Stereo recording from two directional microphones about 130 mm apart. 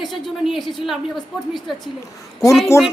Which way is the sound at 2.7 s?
20° left (ahead or behind).